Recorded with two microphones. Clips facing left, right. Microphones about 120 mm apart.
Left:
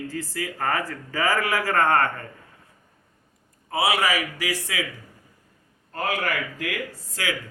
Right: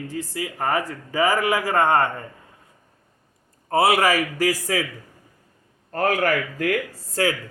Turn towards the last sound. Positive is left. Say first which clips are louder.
# right 7 dB
turn(degrees=-50)  # may be behind; listen again after turning